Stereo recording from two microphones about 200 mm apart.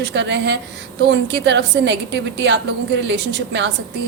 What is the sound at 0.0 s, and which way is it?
A woman's voice, 65° right (ahead or behind).